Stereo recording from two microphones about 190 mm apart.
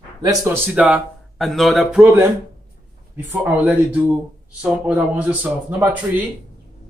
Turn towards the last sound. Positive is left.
turn(degrees=-10)  # may be behind; listen again after turning